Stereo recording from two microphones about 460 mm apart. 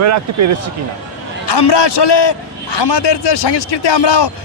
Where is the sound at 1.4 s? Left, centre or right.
Left.